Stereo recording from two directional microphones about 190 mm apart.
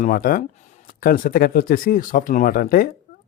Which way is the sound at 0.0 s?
45° left (ahead or behind).